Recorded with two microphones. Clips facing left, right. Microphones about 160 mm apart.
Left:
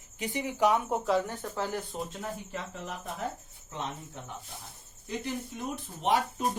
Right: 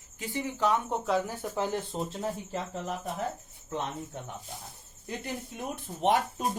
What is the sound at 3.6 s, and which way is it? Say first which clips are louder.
Speech: right 3 dB; 55° right (ahead or behind).